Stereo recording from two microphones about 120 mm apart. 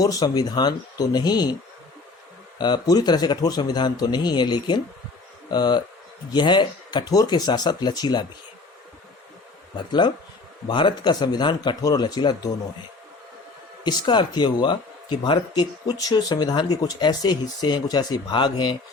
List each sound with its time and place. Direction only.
0.0 s speech: 35° left (ahead or behind)
2.6 s speech: 35° left (ahead or behind)
10.7 s speech: 40° left (ahead or behind)
13.8 s speech: 40° left (ahead or behind)